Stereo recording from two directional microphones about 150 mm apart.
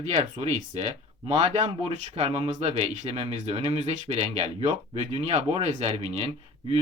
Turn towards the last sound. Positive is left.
turn(degrees=-45)  # may be behind; listen again after turning